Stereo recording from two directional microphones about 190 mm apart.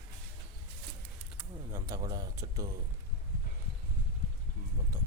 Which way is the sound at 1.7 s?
15° right (ahead or behind).